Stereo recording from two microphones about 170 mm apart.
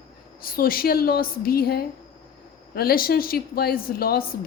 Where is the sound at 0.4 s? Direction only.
60° left (ahead or behind).